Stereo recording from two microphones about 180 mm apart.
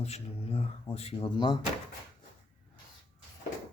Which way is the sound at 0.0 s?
35° left (ahead or behind).